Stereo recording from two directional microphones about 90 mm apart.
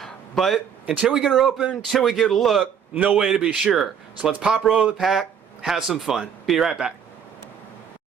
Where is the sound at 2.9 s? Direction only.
15° right (ahead or behind).